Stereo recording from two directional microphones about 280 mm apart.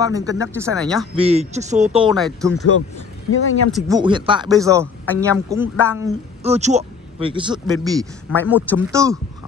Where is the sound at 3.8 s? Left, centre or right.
Centre.